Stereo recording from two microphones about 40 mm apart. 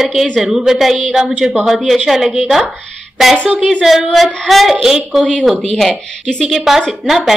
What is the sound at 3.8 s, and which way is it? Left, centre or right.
A woman's voice, centre.